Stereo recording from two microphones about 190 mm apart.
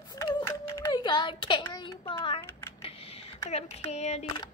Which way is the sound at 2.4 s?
15° left (ahead or behind).